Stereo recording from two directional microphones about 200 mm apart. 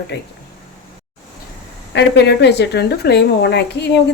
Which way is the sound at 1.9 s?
60° left (ahead or behind).